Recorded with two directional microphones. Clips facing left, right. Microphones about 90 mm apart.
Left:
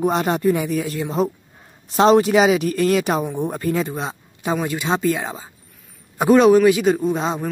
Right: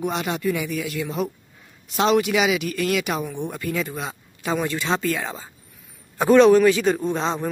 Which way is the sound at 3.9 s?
20° left (ahead or behind).